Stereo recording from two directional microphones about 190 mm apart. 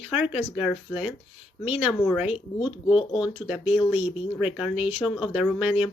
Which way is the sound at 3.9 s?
30° left (ahead or behind).